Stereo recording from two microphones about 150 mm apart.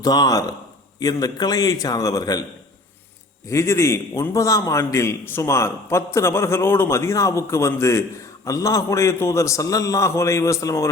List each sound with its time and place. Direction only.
0.0 s a man's voice: 25° left (ahead or behind)
3.5 s a man's voice: 20° left (ahead or behind)